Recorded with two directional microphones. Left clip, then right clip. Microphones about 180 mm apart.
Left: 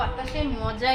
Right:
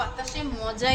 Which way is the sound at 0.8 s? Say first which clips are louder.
Left 1 dB; 35° right (ahead or behind).